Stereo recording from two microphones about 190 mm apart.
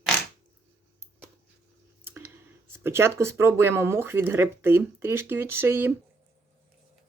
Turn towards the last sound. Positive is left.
turn(degrees=-10)  # may be behind; listen again after turning